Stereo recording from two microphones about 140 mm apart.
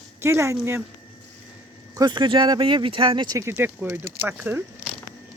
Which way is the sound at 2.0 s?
35° right (ahead or behind).